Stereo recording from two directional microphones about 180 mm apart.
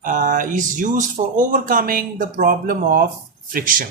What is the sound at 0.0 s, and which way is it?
Speech, 45° right (ahead or behind).